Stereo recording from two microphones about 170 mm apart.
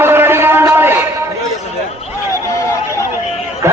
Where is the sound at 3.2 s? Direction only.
40° left (ahead or behind).